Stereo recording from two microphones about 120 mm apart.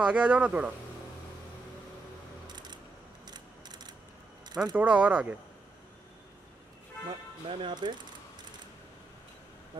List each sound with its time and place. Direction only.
0.0 s speech: 10° right (ahead or behind)
3.3 s a sound: 35° right (ahead or behind)
4.7 s speech: 10° right (ahead or behind)
7.1 s speech: 45° right (ahead or behind)